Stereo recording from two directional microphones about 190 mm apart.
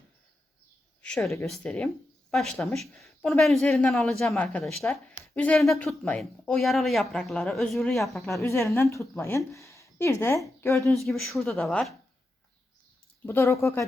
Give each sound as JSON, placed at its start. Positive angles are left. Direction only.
{"t": 1.0, "sound": "speech", "side_deg": 5}
{"t": 2.9, "sound": "speech", "side_deg": 5}
{"t": 8.4, "sound": "a woman's voice", "side_deg": 15}
{"t": 10.9, "sound": "speech", "side_deg": 0}
{"t": 13.2, "sound": "a woman's voice", "side_deg": 10}